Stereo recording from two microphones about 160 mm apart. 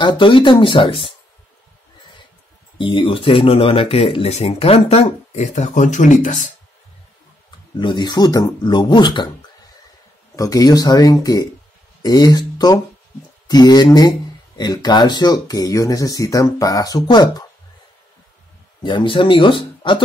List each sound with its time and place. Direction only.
0.0 s speech: 30° left (ahead or behind)
2.8 s speech: 30° left (ahead or behind); by 6.5 s 50° left (ahead or behind)
7.7 s speech: 25° left (ahead or behind)
10.3 s speech: 20° left (ahead or behind)
18.8 s speech: 30° left (ahead or behind)